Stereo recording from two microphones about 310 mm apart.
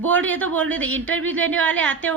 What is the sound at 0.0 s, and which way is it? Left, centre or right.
A woman's voice, centre.